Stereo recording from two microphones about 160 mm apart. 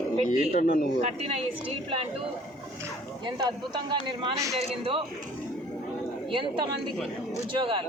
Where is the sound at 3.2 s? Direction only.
25° right (ahead or behind).